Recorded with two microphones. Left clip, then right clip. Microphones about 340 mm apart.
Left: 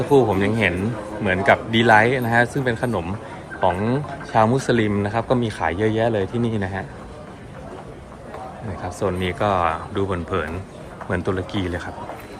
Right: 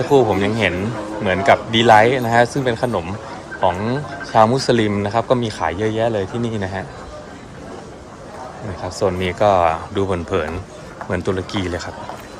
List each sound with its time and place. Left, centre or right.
0.1 s speech: centre
9.0 s speech: centre